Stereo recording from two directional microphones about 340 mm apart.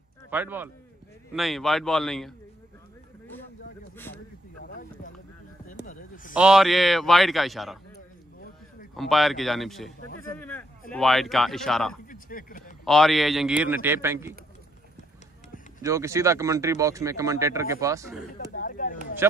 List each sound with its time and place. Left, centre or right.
0.3 s a man's voice: centre
3.9 s a sound: centre
5.7 s a sound: left
6.3 s a man's voice: centre
8.9 s a man's voice: centre
12.1 s a sound: left
12.8 s a man's voice: centre
15.8 s speech: centre
18.5 s speech: left